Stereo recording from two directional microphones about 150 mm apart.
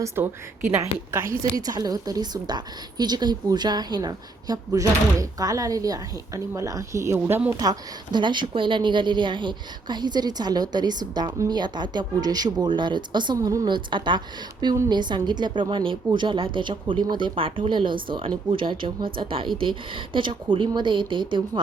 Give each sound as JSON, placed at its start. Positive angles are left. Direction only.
{"t": 0.2, "sound": "a woman's voice", "side_deg": -15}
{"t": 0.9, "sound": "a woman's voice", "side_deg": 40}
{"t": 1.5, "sound": "a woman's voice", "side_deg": -25}
{"t": 7.5, "sound": "a woman's voice", "side_deg": -25}